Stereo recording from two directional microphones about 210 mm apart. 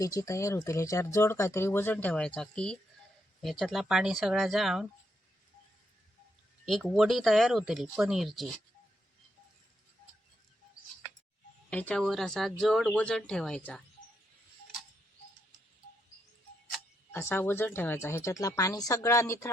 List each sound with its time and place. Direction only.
0.0 s speech: 15° left (ahead or behind); by 4.9 s centre (ahead or behind)
6.7 s speech: centre (ahead or behind)
11.7 s speech: 5° left (ahead or behind)
17.1 s speech: 10° left (ahead or behind)